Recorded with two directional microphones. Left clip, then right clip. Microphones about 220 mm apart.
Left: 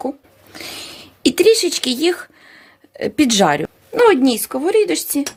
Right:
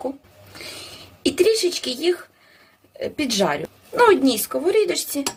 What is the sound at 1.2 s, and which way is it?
Speech, 45° left (ahead or behind).